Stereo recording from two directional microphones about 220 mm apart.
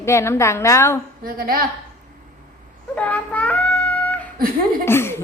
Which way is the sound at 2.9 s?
5° left (ahead or behind).